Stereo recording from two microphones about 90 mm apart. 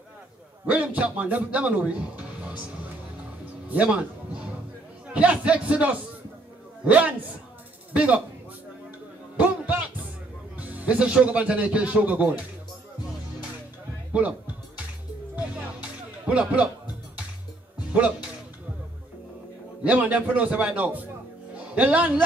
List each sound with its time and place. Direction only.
0.7 s speech: 15° right (ahead or behind)
3.6 s a man's voice: 15° right (ahead or behind)
9.4 s music: 15° right (ahead or behind)
10.6 s speech: 15° right (ahead or behind)
14.1 s speech: 15° right (ahead or behind)
15.3 s music: 15° right (ahead or behind)
19.8 s speech: 15° right (ahead or behind)